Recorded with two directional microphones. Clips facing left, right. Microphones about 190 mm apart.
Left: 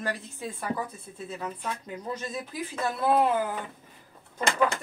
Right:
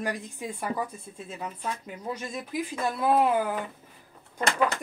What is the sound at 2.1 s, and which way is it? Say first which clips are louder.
Speech: right 2 dB; 10° right (ahead or behind).